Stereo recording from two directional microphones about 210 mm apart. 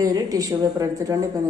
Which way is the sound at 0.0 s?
15° right (ahead or behind).